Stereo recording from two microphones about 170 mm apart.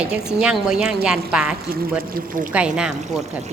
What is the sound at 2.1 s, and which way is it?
Speech, 50° right (ahead or behind).